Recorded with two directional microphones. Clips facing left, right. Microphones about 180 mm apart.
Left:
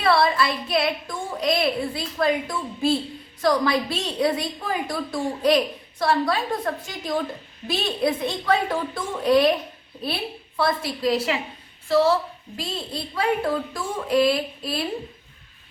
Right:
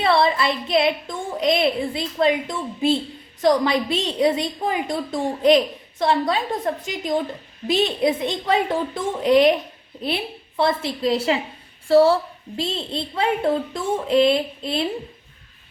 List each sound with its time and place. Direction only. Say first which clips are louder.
0.0 s a woman's voice: right 1 dB; 20° right (ahead or behind)
10.6 s a woman's voice: right 2 dB; 25° right (ahead or behind)